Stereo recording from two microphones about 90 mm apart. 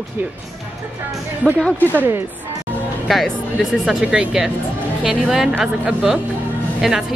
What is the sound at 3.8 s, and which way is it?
Speech, 5° right (ahead or behind).